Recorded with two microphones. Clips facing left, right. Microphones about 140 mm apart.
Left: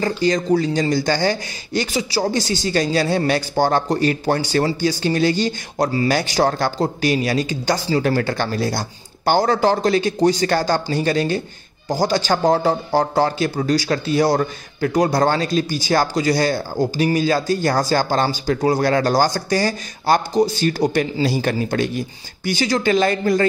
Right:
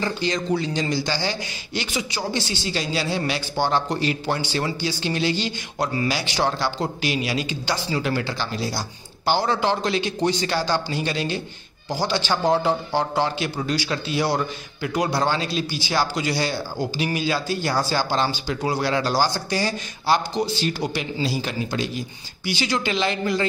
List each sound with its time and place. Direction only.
0.2 s speech: 40° left (ahead or behind)